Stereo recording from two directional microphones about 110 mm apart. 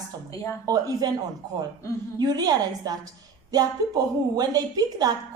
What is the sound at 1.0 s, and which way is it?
Speech, 40° right (ahead or behind).